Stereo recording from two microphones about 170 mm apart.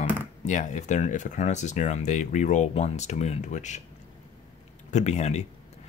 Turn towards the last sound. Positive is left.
turn(degrees=40)  # may be behind; listen again after turning